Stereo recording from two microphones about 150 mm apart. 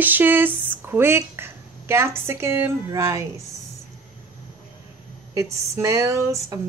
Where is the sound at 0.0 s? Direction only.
10° right (ahead or behind).